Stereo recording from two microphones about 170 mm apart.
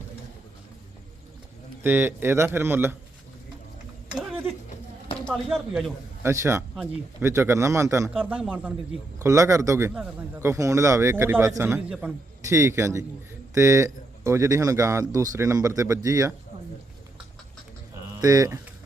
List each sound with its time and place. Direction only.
1.8 s a man's voice: 10° right (ahead or behind)
4.1 s a sound: 10° right (ahead or behind)
5.2 s speech: centre (ahead or behind)
6.2 s a man's voice: 15° right (ahead or behind)
9.1 s a man's voice: 20° right (ahead or behind)
18.2 s speech: 20° right (ahead or behind)